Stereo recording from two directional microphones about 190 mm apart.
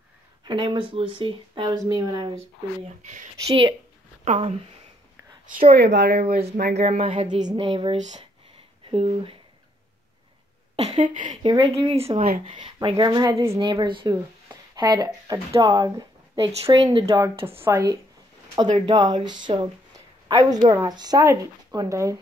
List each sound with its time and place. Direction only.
0.5 s speech: 25° right (ahead or behind)
3.0 s speech: 40° right (ahead or behind)
3.3 s speech: 20° right (ahead or behind)
4.2 s speech: 35° right (ahead or behind)
5.5 s speech: 50° right (ahead or behind)
6.7 s speech: 35° right (ahead or behind)
10.8 s speech: 35° right (ahead or behind)
11.4 s a woman's voice: 25° right (ahead or behind)